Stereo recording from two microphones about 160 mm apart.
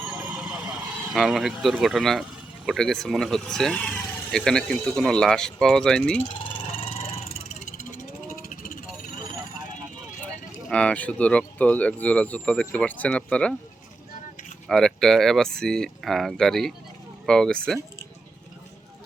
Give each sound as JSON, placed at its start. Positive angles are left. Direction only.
{"t": 0.0, "sound": "vehicle", "side_deg": -5}
{"t": 2.6, "sound": "speech", "side_deg": 5}
{"t": 6.7, "sound": "a sound", "side_deg": 35}
{"t": 8.4, "sound": "vehicle", "side_deg": 55}
{"t": 10.7, "sound": "speech", "side_deg": 5}
{"t": 14.7, "sound": "speech", "side_deg": 5}